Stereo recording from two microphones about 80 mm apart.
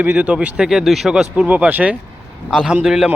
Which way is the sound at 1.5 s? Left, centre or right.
Centre.